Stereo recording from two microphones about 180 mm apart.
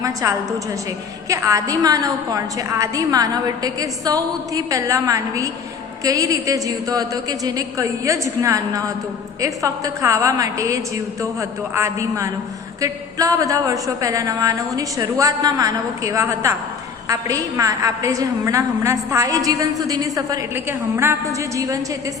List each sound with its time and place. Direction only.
0.0 s a woman's voice: 20° right (ahead or behind)